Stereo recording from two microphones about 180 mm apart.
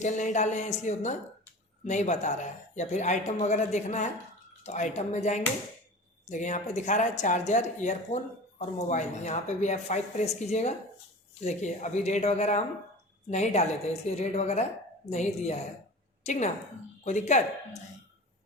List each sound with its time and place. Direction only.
0.0 s a woman's voice: 40° left (ahead or behind)